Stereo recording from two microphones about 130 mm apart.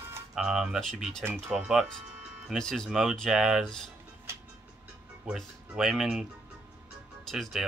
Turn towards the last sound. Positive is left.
turn(degrees=0)  # may be behind; listen again after turning